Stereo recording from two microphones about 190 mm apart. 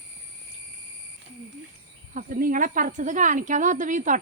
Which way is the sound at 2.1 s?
45° right (ahead or behind).